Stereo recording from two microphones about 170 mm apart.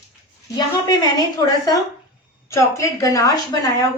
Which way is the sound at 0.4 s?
25° left (ahead or behind).